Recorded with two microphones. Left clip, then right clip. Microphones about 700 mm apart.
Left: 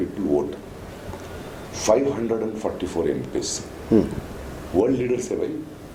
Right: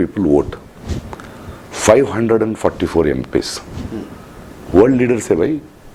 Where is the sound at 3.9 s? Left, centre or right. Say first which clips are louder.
Left 11 dB; left.